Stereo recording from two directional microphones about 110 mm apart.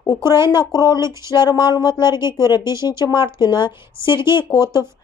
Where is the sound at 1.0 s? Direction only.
25° right (ahead or behind).